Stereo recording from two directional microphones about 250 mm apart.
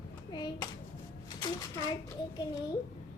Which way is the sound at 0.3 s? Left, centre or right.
Centre.